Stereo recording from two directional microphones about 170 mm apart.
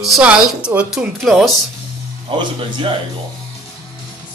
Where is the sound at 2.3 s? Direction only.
30° right (ahead or behind).